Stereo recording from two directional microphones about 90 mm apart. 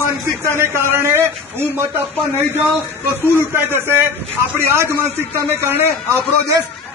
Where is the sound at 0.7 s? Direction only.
30° right (ahead or behind).